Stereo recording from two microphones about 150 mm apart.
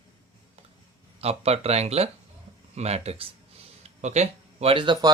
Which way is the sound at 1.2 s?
45° right (ahead or behind).